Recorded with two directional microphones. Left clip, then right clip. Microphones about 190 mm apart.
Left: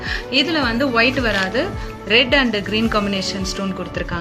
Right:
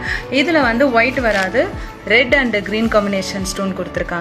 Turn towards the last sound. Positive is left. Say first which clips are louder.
# right 4 dB
turn(degrees=20)  # may be behind; listen again after turning